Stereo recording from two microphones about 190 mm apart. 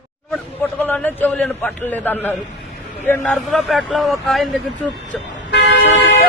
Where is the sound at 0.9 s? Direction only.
10° left (ahead or behind).